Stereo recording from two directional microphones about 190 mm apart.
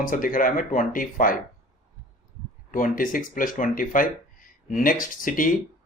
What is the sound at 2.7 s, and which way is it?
Speech, 45° left (ahead or behind).